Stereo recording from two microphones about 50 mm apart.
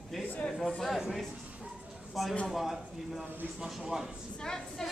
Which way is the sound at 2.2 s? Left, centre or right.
Centre.